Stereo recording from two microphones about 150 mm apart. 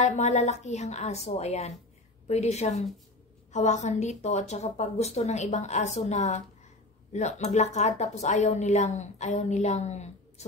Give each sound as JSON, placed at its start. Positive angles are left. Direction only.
{"t": 0.0, "sound": "a woman's voice", "side_deg": 50}